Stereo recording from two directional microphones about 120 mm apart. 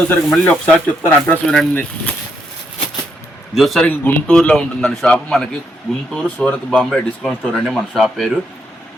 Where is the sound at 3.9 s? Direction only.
15° left (ahead or behind).